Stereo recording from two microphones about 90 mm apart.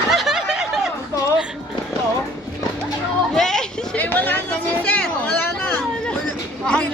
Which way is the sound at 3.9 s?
20° left (ahead or behind).